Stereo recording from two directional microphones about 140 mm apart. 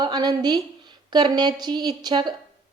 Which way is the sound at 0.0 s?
30° right (ahead or behind).